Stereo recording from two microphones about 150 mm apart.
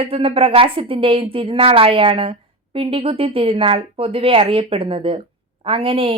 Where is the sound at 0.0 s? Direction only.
40° right (ahead or behind).